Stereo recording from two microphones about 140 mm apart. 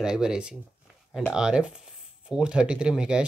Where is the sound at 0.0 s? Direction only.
5° right (ahead or behind).